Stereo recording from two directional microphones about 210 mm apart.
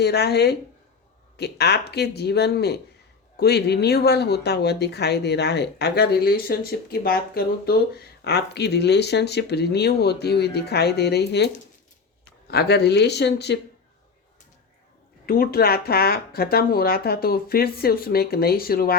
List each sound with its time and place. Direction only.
0.0 s speech: 50° left (ahead or behind)
15.3 s speech: 45° left (ahead or behind)